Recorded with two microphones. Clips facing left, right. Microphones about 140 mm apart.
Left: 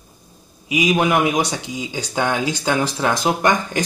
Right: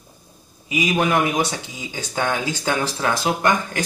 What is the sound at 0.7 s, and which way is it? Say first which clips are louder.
Speech: left 2 dB; 15° left (ahead or behind).